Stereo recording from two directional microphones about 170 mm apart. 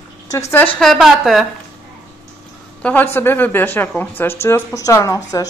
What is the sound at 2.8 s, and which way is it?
Speech, 10° left (ahead or behind).